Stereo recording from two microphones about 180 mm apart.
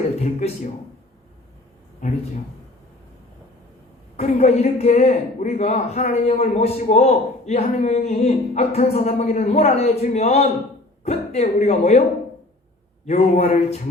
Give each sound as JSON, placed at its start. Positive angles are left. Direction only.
{"t": 0.2, "sound": "speech", "side_deg": 40}
{"t": 2.0, "sound": "a man's voice", "side_deg": 40}
{"t": 4.2, "sound": "a man's voice", "side_deg": 40}
{"t": 13.1, "sound": "a man's voice", "side_deg": 40}